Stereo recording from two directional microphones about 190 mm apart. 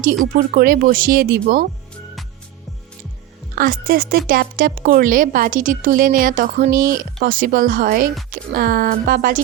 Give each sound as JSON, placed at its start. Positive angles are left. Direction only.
{"t": 0.3, "sound": "a woman's voice", "side_deg": -50}
{"t": 3.5, "sound": "a woman's voice", "side_deg": -50}